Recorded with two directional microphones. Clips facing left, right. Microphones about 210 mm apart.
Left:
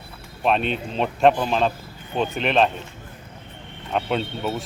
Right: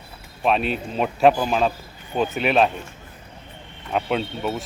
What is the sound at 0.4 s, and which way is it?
Speech, 5° right (ahead or behind).